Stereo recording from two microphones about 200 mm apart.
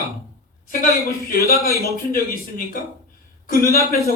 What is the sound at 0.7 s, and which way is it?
Speech, 45° left (ahead or behind).